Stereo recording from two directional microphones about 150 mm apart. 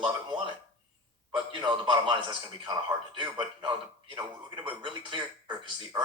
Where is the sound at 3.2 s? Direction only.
30° right (ahead or behind).